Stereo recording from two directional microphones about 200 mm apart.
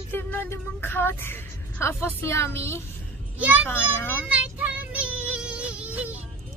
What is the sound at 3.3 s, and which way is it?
Music, 10° right (ahead or behind).